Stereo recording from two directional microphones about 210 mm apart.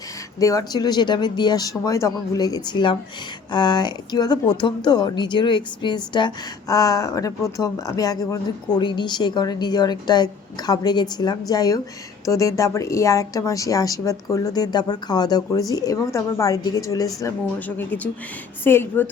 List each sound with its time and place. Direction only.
0.3 s a woman's voice: 15° left (ahead or behind)